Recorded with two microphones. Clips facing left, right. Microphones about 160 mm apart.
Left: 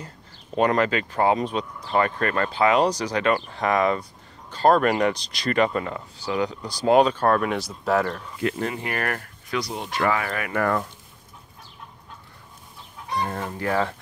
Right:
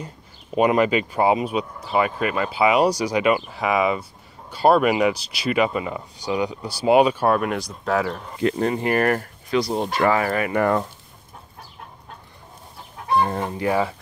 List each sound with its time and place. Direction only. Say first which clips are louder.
0.6 s speech: right 3 dB; 15° right (ahead or behind)
8.4 s speech: right 6 dB; 35° right (ahead or behind)
13.3 s chicken: right 3 dB; 20° right (ahead or behind)